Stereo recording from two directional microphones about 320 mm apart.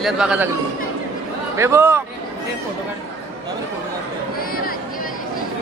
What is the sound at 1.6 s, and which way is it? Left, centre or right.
Speech, centre.